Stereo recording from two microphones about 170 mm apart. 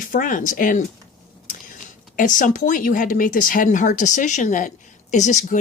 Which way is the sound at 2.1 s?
50° left (ahead or behind).